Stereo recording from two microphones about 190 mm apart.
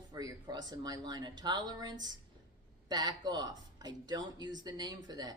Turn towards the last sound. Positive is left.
turn(degrees=-20)  # may be behind; listen again after turning